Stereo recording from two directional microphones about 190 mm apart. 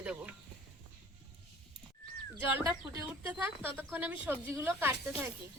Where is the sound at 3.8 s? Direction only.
10° right (ahead or behind).